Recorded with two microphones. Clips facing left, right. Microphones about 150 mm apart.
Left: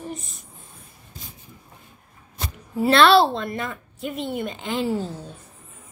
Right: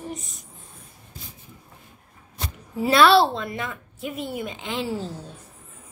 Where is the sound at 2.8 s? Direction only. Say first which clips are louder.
Left 1 dB; 10° right (ahead or behind).